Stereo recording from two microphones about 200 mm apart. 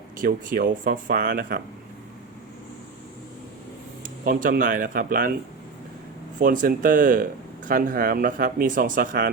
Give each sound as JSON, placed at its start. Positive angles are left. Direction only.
{"t": 0.2, "sound": "speech", "side_deg": -45}
{"t": 4.0, "sound": "speech", "side_deg": -45}
{"t": 6.4, "sound": "speech", "side_deg": -45}